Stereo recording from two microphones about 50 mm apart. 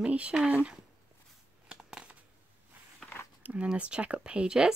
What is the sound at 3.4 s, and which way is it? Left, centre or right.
Speech, right.